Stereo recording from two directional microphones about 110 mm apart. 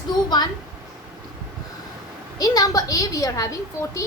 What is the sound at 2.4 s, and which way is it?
A woman's voice, 35° left (ahead or behind).